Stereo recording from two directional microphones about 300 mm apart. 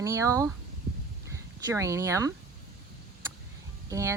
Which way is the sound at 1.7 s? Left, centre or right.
Centre.